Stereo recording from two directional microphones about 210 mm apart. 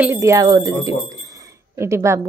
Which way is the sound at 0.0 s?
15° right (ahead or behind).